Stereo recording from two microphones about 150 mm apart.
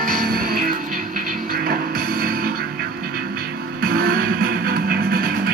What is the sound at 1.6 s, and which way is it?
Music, 80° right.